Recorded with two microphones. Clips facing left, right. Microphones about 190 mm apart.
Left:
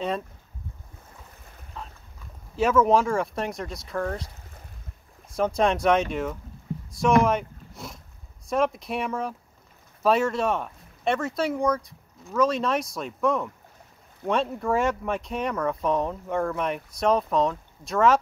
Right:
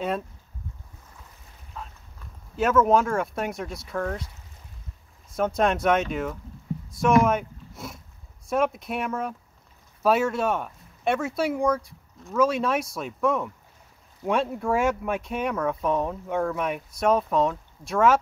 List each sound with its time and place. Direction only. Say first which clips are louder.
1.8 s clip-clop: even; centre (ahead or behind)
2.5 s speech: even; centre (ahead or behind)
5.3 s speech: even; centre (ahead or behind)